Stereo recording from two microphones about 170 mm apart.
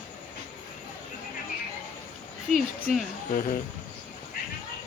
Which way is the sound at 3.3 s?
50° left (ahead or behind).